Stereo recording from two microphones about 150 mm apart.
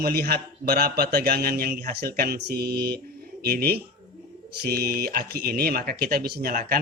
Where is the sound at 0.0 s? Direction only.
90° right.